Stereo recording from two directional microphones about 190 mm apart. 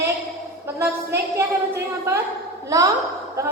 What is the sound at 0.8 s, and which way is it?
A woman's voice, 15° right (ahead or behind).